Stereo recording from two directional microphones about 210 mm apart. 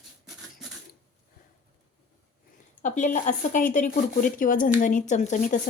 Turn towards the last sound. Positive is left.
turn(degrees=35)  # may be behind; listen again after turning